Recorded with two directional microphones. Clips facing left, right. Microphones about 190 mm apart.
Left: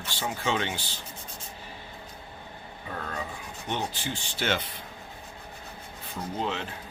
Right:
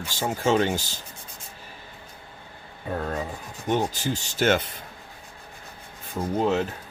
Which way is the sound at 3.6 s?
40° right (ahead or behind).